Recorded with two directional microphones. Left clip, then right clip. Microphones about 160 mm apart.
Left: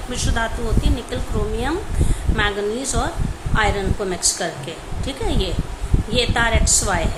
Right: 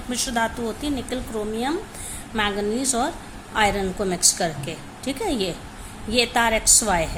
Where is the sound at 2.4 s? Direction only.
40° right (ahead or behind).